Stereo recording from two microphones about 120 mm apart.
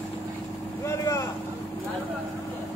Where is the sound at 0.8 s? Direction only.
25° left (ahead or behind).